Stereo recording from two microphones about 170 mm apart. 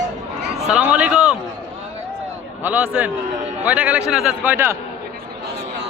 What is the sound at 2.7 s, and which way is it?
A man's voice, 10° right (ahead or behind).